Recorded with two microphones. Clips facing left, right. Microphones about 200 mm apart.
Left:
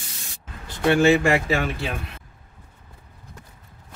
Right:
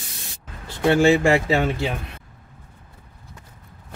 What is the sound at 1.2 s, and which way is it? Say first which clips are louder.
Speech: right 3 dB; 25° right (ahead or behind).